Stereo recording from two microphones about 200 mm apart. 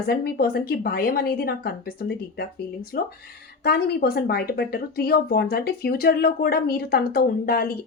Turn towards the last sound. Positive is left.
turn(degrees=50)  # may be behind; listen again after turning